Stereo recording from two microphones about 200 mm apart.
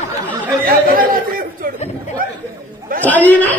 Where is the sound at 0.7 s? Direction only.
45° right (ahead or behind).